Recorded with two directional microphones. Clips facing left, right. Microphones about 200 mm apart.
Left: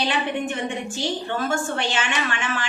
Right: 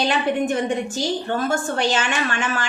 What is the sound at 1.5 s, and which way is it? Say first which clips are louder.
A woman's voice: right 5 dB; 40° right (ahead or behind).